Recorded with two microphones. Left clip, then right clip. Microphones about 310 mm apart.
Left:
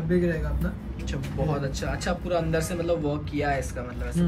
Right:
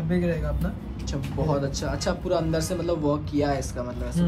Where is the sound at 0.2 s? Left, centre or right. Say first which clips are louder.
Even; centre.